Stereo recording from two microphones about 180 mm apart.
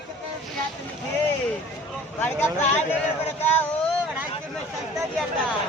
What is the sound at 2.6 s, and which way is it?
Speech, 40° left (ahead or behind).